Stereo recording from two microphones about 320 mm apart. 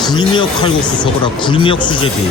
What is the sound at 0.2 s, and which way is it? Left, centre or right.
Speech, centre.